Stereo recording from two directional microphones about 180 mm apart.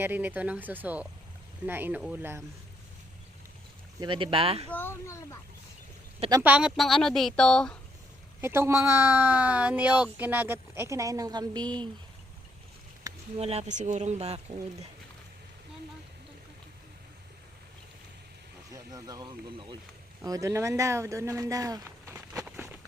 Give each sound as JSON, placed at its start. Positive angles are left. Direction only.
{"t": 0.0, "sound": "speech", "side_deg": -10}
{"t": 4.0, "sound": "speech", "side_deg": -30}
{"t": 4.7, "sound": "speech", "side_deg": 10}
{"t": 6.3, "sound": "speech", "side_deg": -10}
{"t": 8.4, "sound": "speech", "side_deg": -15}
{"t": 13.3, "sound": "speech", "side_deg": -35}
{"t": 18.7, "sound": "speech", "side_deg": -20}
{"t": 22.4, "sound": "walk", "side_deg": -10}